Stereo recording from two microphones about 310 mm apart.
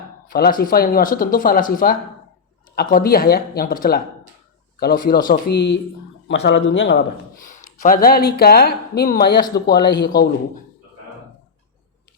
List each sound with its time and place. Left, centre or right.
0.3 s speech: left
7.4 s speech: left